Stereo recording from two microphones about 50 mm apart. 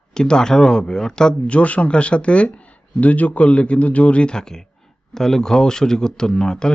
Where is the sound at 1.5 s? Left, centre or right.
Left.